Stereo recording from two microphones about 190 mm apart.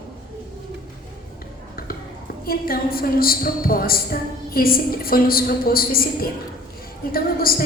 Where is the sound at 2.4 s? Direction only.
50° left (ahead or behind).